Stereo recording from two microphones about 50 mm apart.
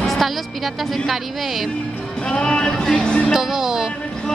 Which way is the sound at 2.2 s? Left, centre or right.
Centre.